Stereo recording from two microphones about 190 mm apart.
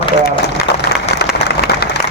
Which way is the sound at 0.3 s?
60° left (ahead or behind).